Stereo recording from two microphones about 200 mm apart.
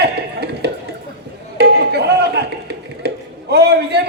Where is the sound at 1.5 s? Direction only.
55° right (ahead or behind).